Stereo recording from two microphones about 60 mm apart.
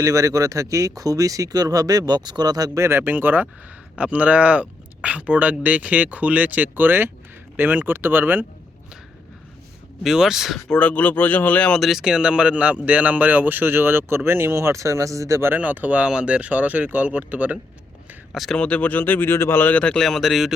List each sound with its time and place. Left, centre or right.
0.0 s speech: right
2.8 s speech: right
3.9 s a man's voice: right
10.0 s speech: centre
10.7 s speech: left
11.8 s a man's voice: centre; by 15.4 s right
15.5 s a man's voice: right
18.3 s speech: centre
18.5 s speech: centre
18.9 s speech: left
19.7 s speech: centre
20.0 s speech: centre